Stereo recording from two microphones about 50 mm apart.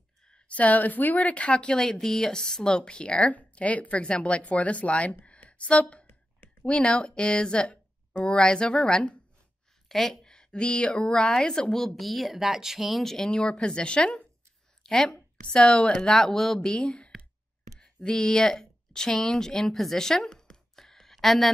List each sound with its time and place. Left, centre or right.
0.3 s speech: left
1.8 s speech: centre; by 5.1 s left
5.2 s a sound: left
6.6 s speech: left
9.8 s a woman's voice: centre
16.7 s speech: left
17.7 s a sound: centre